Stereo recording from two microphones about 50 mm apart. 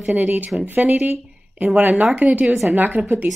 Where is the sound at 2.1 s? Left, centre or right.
Right.